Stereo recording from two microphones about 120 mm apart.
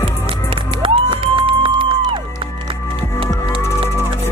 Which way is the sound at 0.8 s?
45° right (ahead or behind).